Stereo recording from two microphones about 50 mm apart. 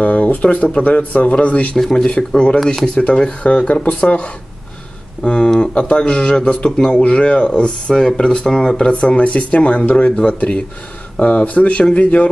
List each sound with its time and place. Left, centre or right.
0.0 s speech: left
1.8 s speech: centre
2.0 s speech: left
2.6 s speech: centre
2.9 s speech: left
5.2 s speech: centre